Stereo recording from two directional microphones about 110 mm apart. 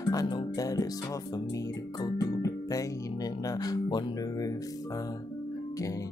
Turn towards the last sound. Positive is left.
turn(degrees=40)  # may be behind; listen again after turning